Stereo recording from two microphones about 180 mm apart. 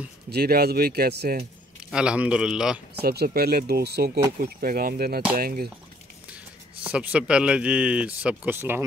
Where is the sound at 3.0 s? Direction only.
60° right (ahead or behind).